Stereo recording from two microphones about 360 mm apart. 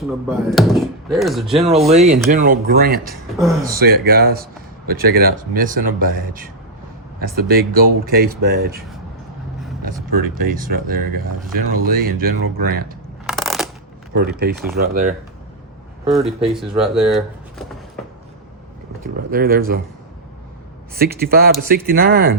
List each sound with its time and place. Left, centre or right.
0.0 s speech: centre
1.5 s speech: centre
3.0 s speech: centre
3.7 s speech: right
9.8 s speech: right
13.2 s a sound: centre
14.1 s speech: right
16.0 s speech: centre
19.3 s speech: right
20.9 s speech: right